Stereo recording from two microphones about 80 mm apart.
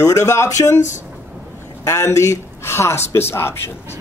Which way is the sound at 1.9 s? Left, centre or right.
Left.